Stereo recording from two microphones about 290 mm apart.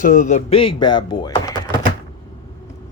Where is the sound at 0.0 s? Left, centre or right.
Left.